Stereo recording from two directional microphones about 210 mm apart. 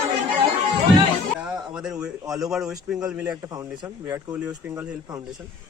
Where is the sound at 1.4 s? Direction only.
5° right (ahead or behind).